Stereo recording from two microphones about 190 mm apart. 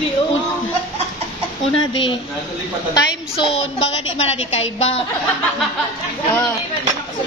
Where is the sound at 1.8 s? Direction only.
25° left (ahead or behind).